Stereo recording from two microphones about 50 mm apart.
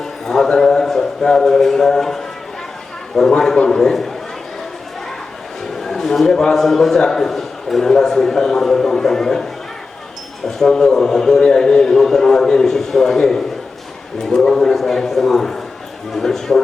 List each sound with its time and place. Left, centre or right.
0.0 s a sound: centre
3.2 s a man's voice: centre
5.7 s a man's voice: centre